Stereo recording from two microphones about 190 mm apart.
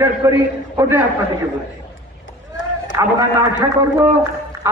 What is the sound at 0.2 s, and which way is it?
Speech, 15° right (ahead or behind).